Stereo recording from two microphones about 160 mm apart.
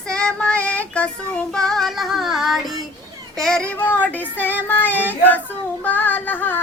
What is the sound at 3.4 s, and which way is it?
Child singing, 5° left (ahead or behind).